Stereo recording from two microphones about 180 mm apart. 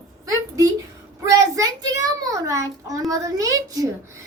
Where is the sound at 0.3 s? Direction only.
20° right (ahead or behind).